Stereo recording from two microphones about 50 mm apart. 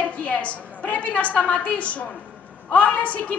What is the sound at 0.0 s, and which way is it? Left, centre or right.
A woman's voice, left.